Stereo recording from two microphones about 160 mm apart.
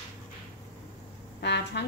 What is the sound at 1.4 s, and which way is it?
Music, 90° left.